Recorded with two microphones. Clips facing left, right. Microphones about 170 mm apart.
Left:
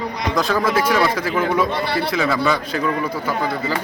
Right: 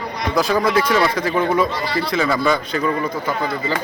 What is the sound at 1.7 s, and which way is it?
Speech, 60° left (ahead or behind).